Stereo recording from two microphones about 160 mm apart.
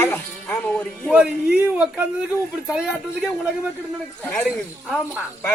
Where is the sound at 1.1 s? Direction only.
5° right (ahead or behind).